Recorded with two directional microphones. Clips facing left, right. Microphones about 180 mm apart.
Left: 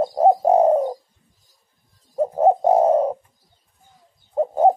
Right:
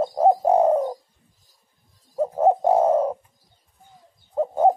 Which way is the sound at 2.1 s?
20° left (ahead or behind).